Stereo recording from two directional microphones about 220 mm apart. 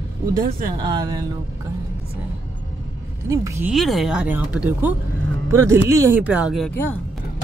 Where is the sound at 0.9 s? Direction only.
20° right (ahead or behind).